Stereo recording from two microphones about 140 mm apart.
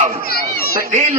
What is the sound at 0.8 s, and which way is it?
Speech, 55° right (ahead or behind).